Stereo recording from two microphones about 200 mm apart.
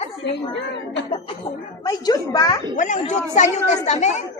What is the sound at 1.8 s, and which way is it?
Speech, 20° left (ahead or behind).